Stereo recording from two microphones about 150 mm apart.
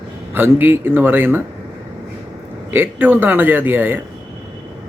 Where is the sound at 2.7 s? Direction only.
15° right (ahead or behind).